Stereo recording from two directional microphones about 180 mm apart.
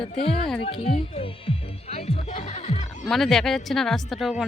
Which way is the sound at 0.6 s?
30° left (ahead or behind).